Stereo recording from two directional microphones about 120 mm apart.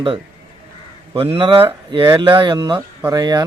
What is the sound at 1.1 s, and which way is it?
A man's voice, 50° right (ahead or behind).